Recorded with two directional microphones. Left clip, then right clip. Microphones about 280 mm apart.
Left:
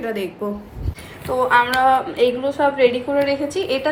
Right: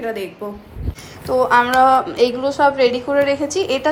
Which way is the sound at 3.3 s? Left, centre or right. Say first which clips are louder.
Right 2 dB; right.